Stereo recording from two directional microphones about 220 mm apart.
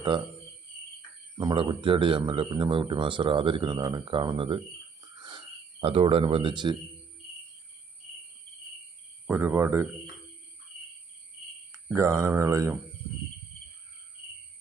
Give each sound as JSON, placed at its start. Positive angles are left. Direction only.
{"t": 1.4, "sound": "speech", "side_deg": -20}
{"t": 5.2, "sound": "cricket", "side_deg": -20}
{"t": 9.2, "sound": "speech", "side_deg": -10}
{"t": 11.9, "sound": "speech", "side_deg": -15}